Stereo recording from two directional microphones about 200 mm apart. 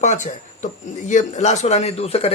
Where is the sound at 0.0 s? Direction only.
35° left (ahead or behind).